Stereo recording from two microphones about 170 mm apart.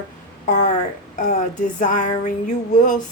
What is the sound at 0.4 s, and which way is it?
Speech, 45° left (ahead or behind).